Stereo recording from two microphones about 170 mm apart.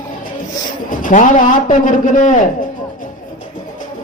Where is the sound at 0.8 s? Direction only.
50° left (ahead or behind).